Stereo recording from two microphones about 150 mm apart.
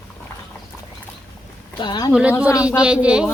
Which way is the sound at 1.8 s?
30° left (ahead or behind).